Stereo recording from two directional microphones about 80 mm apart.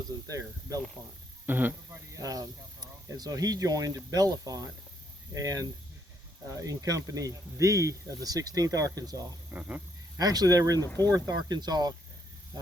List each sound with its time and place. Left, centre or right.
0.3 s speech: right
1.5 s a man's voice: right
2.1 s speech: right
9.5 s speech: centre
10.2 s speech: right
10.8 s speech: left
11.1 s speech: right